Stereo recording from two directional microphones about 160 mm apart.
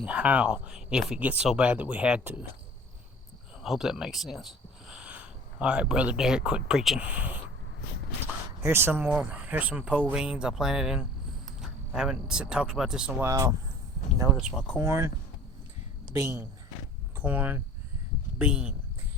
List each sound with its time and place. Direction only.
0.0 s speech: 10° right (ahead or behind)
3.6 s speech: centre (ahead or behind)
8.6 s speech: 15° right (ahead or behind)
13.2 s speech: 20° right (ahead or behind)
14.8 s speech: 15° right (ahead or behind)
16.1 s speech: 15° right (ahead or behind)